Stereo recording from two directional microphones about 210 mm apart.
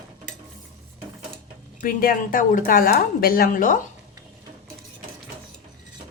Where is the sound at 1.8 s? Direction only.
45° left (ahead or behind).